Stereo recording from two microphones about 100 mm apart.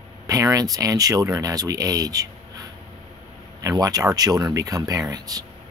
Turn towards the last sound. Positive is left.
turn(degrees=-40)  # may be behind; listen again after turning